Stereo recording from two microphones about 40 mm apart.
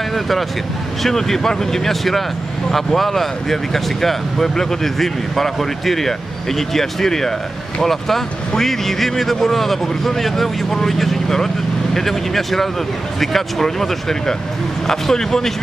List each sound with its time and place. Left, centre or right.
0.1 s speech: centre